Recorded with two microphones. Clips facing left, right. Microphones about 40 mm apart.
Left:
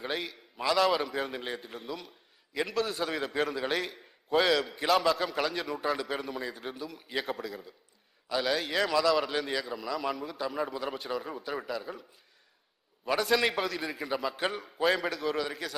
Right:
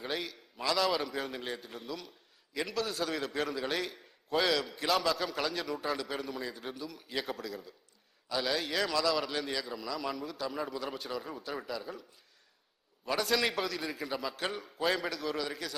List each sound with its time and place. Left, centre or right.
0.0 s a man's voice: centre
13.1 s a man's voice: centre